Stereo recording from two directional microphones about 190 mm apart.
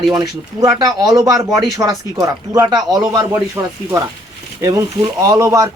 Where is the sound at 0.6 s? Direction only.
20° right (ahead or behind).